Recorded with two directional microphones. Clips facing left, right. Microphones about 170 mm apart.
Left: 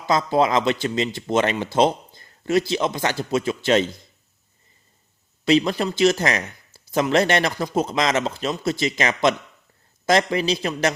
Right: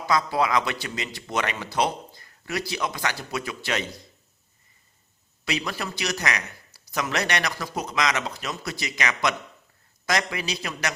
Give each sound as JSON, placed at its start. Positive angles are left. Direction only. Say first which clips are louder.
{"t": 0.0, "sound": "speech", "louder": "left 4 dB", "side_deg": 25}
{"t": 5.5, "sound": "speech", "louder": "left 11 dB", "side_deg": 25}